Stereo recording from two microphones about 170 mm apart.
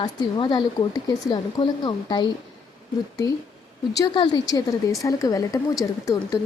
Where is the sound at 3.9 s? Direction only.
25° left (ahead or behind).